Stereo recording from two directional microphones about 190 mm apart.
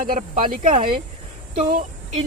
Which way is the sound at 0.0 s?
45° right (ahead or behind).